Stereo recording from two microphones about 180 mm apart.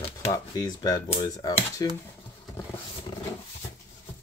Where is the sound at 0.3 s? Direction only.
20° left (ahead or behind).